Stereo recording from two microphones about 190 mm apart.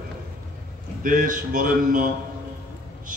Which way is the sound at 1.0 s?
45° right (ahead or behind).